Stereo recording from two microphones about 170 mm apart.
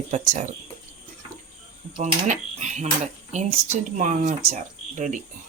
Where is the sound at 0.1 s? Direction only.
45° right (ahead or behind).